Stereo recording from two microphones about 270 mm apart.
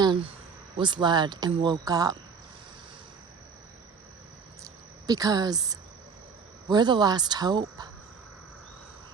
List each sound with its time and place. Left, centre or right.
0.0 s speech: centre
5.0 s speech: centre